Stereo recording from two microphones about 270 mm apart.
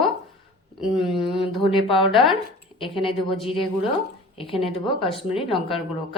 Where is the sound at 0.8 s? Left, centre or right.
Centre.